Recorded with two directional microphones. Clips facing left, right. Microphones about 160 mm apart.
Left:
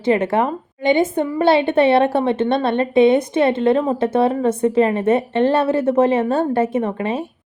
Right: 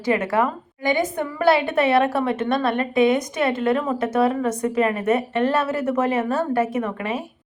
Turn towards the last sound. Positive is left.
turn(degrees=30)  # may be behind; listen again after turning